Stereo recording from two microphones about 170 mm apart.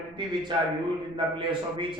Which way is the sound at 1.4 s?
30° right (ahead or behind).